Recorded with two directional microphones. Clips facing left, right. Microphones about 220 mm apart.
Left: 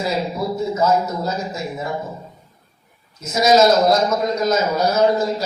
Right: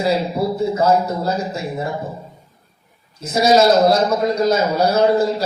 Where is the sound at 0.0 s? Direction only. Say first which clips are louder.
Right 4 dB; 30° right (ahead or behind).